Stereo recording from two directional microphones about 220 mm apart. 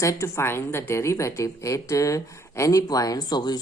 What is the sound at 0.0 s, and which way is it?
A woman's voice, 15° left (ahead or behind).